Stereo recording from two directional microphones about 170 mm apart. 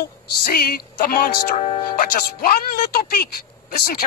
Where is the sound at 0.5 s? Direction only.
65° left (ahead or behind).